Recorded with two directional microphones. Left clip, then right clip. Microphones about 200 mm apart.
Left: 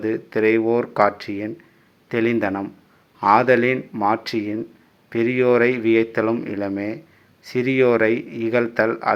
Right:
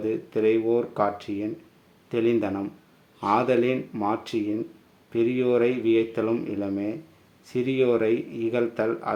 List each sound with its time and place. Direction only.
0.0 s speech: 15° left (ahead or behind)